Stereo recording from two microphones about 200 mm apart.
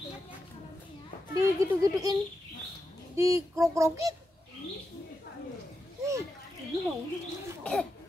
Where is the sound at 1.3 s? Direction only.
15° right (ahead or behind).